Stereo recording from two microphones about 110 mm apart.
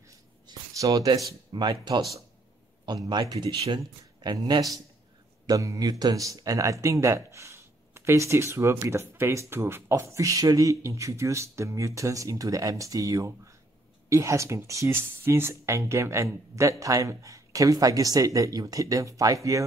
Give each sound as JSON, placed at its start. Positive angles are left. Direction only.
{"t": 0.5, "sound": "a sound", "side_deg": -35}
{"t": 1.5, "sound": "speech", "side_deg": -40}
{"t": 3.1, "sound": "speech", "side_deg": -40}